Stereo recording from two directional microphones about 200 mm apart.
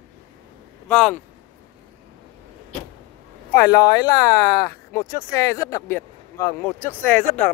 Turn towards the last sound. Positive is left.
turn(degrees=10)  # may be behind; listen again after turning